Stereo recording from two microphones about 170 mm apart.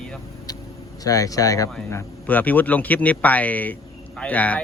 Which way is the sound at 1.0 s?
20° left (ahead or behind).